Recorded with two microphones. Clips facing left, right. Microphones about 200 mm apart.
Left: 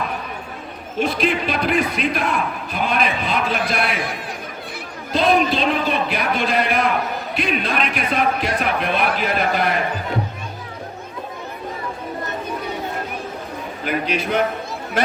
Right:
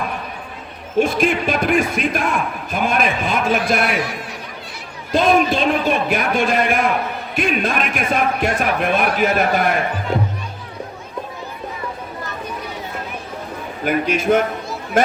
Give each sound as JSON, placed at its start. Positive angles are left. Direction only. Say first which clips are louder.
{"t": 0.9, "sound": "speech", "louder": "right 4 dB", "side_deg": -45}
{"t": 5.1, "sound": "speech", "louder": "right 2 dB", "side_deg": -45}
{"t": 13.8, "sound": "speech", "louder": "right 5 dB", "side_deg": -45}